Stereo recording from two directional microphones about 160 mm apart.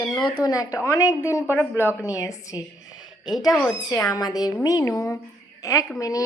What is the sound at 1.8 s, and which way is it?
Speech, 10° right (ahead or behind).